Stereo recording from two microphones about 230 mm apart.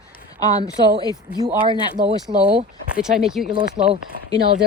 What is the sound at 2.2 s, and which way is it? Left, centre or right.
Speech, centre.